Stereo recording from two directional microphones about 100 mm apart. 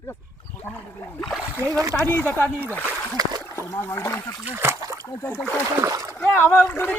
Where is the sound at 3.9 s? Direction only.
25° left (ahead or behind).